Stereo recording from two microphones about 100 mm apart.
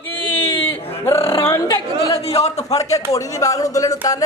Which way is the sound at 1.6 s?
35° left (ahead or behind).